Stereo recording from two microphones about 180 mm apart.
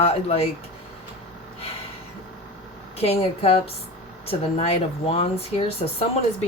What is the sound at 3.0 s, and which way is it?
Speech, 35° left (ahead or behind).